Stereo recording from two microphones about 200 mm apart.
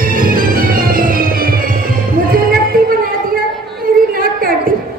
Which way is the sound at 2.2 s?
45° right (ahead or behind).